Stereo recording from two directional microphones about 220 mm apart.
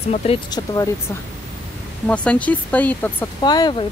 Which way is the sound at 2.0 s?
5° left (ahead or behind).